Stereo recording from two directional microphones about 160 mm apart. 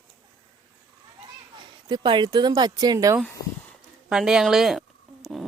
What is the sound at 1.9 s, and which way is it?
Speech, 30° right (ahead or behind).